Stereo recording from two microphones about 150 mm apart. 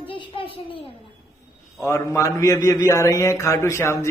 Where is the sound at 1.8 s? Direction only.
20° left (ahead or behind).